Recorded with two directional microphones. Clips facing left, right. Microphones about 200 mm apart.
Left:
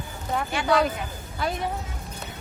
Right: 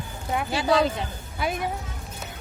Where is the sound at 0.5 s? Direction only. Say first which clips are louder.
Right 1 dB; 25° right (ahead or behind).